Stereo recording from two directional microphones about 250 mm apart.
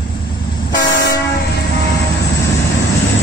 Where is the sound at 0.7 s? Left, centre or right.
Left.